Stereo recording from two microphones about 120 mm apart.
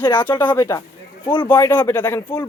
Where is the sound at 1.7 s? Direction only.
15° left (ahead or behind).